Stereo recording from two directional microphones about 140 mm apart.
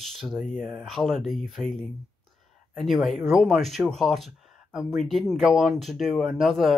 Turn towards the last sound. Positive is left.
turn(degrees=0)  # may be behind; listen again after turning